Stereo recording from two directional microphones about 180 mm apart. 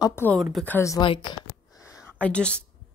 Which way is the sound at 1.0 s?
25° left (ahead or behind).